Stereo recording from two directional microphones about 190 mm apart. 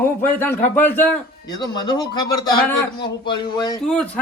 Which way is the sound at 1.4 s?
20° left (ahead or behind).